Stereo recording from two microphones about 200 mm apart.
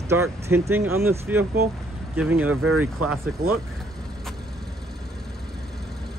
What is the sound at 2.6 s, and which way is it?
Speech, 90° right.